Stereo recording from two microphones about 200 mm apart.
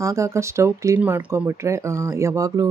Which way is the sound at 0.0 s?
15° right (ahead or behind).